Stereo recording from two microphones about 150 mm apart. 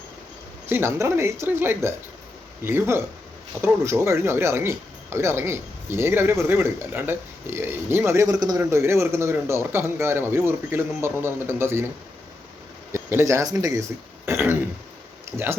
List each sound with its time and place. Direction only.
0.7 s speech: 15° right (ahead or behind)
12.9 s speech: 15° right (ahead or behind)